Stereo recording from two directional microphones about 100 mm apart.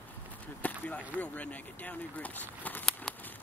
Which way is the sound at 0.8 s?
15° left (ahead or behind).